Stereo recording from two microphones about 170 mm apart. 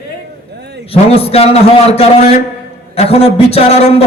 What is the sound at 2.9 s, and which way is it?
A man's voice, 35° left (ahead or behind).